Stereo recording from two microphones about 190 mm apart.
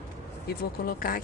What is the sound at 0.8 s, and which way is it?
Speech, 50° left (ahead or behind).